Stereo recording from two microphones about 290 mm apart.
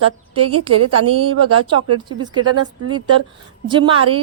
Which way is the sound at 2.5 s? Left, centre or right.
Right.